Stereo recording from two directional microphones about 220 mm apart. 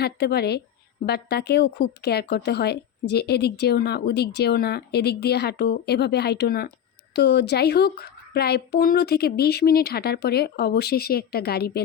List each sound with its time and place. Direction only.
0.0 s a woman's voice: 45° left (ahead or behind)